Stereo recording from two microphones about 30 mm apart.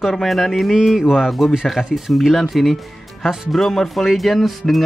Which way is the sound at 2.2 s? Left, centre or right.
Centre.